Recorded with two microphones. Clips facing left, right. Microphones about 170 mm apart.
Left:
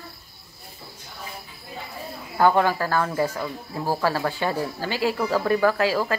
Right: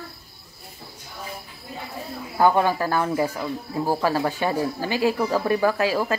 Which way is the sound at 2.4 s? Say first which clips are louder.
Even; 15° right (ahead or behind).